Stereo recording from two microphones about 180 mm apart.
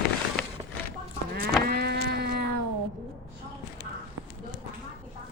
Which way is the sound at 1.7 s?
65° right (ahead or behind).